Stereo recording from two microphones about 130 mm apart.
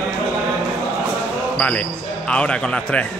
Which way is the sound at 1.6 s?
10° left (ahead or behind).